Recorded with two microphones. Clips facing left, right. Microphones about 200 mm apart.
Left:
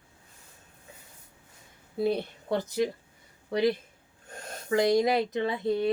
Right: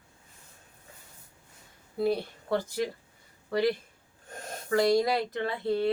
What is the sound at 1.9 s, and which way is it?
Speech, 20° left (ahead or behind).